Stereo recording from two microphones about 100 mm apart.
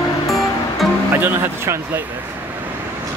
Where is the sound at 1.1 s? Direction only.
25° right (ahead or behind).